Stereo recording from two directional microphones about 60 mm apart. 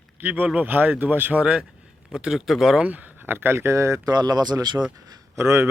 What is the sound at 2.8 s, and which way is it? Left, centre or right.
Speech, right.